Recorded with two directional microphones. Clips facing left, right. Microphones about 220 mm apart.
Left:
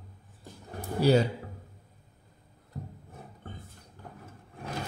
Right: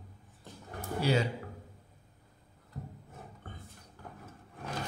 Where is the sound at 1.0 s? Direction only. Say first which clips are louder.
Left 7 dB; 40° left (ahead or behind).